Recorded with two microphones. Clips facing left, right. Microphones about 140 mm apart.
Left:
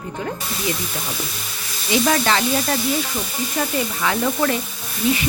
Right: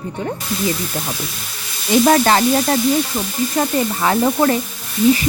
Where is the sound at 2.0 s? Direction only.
40° right (ahead or behind).